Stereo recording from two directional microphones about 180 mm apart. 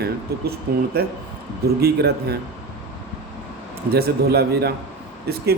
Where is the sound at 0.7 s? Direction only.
60° right (ahead or behind).